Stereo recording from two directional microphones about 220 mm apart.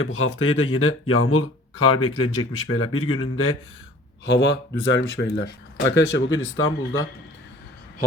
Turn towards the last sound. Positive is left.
turn(degrees=65)  # may be behind; listen again after turning